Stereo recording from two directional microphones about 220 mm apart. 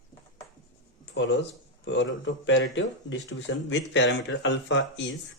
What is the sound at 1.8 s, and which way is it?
Speech, 55° left (ahead or behind).